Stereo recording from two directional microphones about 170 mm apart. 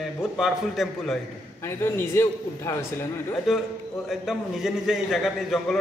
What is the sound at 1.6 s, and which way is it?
A man's voice, 15° left (ahead or behind).